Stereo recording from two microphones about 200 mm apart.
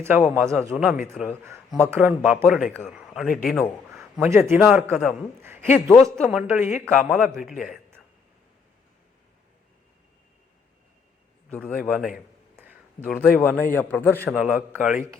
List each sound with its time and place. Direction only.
0.0 s a man's voice: 10° right (ahead or behind)
0.7 s a man's voice: centre (ahead or behind)
4.2 s a man's voice: 10° right (ahead or behind)
6.6 s a man's voice: 35° left (ahead or behind)
6.8 s a man's voice: centre (ahead or behind)
11.4 s a man's voice: 5° left (ahead or behind)
12.5 s a sound: 10° right (ahead or behind)
13.1 s a man's voice: 5° left (ahead or behind)
14.3 s a man's voice: 5° right (ahead or behind)